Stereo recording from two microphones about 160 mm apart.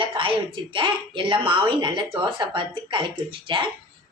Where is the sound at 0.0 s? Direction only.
30° right (ahead or behind).